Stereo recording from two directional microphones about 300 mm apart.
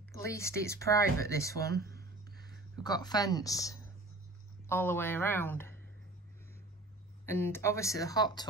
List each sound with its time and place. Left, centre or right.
0.1 s speech: centre
1.8 s a sound: right
2.7 s speech: centre
7.2 s speech: centre